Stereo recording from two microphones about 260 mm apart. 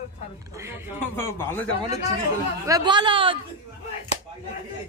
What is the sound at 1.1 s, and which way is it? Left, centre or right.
Speech, centre.